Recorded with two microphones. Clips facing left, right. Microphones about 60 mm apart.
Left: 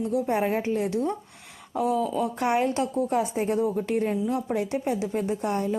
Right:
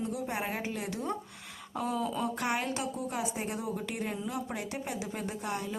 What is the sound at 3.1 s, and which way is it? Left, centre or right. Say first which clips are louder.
A woman's voice: left 9 dB; left.